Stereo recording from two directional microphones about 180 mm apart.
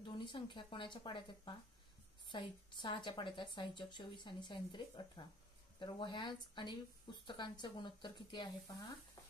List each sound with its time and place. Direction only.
0.0 s speech: 25° left (ahead or behind)